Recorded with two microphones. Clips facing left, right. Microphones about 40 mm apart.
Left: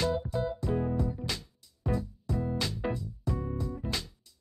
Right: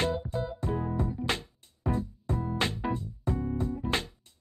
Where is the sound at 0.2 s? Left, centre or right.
Centre.